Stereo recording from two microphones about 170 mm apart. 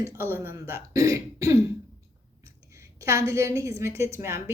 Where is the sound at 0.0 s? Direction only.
15° right (ahead or behind).